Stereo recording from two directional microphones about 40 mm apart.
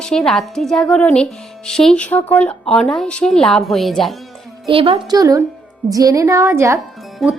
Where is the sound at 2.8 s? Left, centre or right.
Centre.